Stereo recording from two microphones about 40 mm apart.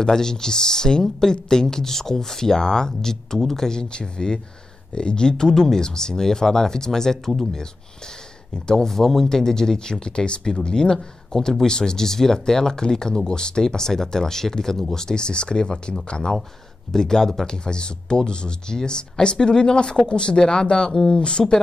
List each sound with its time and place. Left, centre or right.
0.0 s speech: centre
8.6 s speech: centre